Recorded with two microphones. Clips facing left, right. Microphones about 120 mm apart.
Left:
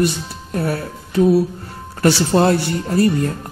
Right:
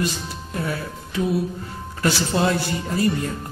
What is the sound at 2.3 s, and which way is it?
Speech, 45° left (ahead or behind).